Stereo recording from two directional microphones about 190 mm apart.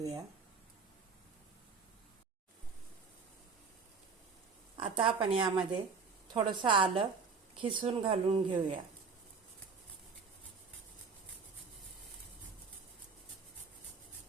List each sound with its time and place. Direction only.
4.8 s a woman's voice: 30° right (ahead or behind)